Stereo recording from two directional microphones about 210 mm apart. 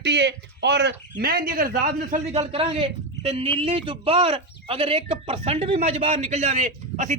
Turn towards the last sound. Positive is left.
turn(degrees=-35)  # may be behind; listen again after turning